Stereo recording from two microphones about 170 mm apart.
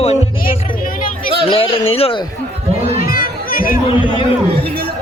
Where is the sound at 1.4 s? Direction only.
30° left (ahead or behind).